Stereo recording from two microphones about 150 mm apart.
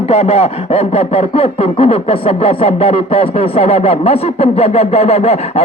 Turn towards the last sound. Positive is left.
turn(degrees=45)  # may be behind; listen again after turning